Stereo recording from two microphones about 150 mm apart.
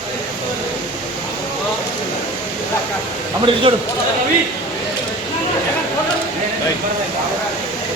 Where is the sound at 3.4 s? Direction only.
35° right (ahead or behind).